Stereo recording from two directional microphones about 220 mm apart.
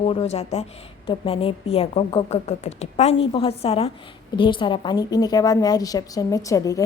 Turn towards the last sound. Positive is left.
turn(degrees=15)  # may be behind; listen again after turning